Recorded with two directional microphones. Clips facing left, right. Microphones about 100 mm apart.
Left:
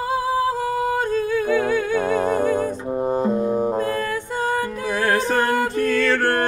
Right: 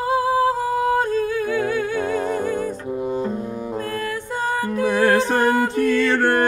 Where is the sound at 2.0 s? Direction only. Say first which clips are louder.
Left 2 dB; 40° left (ahead or behind).